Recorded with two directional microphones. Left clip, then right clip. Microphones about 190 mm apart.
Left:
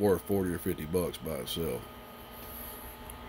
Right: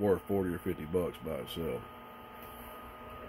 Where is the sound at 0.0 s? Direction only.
10° left (ahead or behind).